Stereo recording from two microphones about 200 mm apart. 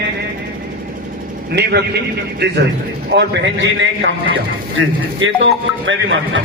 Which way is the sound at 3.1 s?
55° right (ahead or behind).